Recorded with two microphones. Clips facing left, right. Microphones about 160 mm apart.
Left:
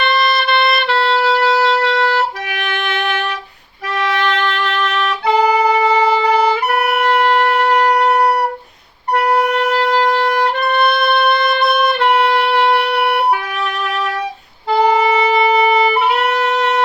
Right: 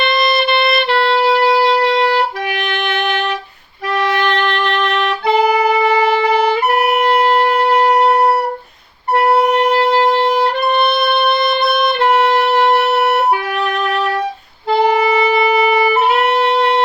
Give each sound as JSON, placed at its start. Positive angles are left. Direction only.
{"t": 0.9, "sound": "music", "side_deg": -50}
{"t": 1.3, "sound": "wind instrument", "side_deg": -50}
{"t": 4.4, "sound": "music", "side_deg": -55}
{"t": 7.3, "sound": "shofar", "side_deg": -30}
{"t": 9.1, "sound": "clarinet", "side_deg": -30}
{"t": 9.6, "sound": "music", "side_deg": -30}
{"t": 12.5, "sound": "music", "side_deg": -45}
{"t": 15.0, "sound": "wind instrument", "side_deg": 20}
{"t": 16.3, "sound": "wind instrument", "side_deg": -30}